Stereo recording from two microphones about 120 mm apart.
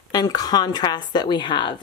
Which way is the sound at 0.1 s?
35° left (ahead or behind).